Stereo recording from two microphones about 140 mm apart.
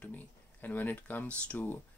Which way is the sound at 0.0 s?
10° left (ahead or behind).